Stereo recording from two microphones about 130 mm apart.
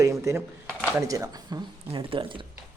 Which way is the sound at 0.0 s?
20° right (ahead or behind).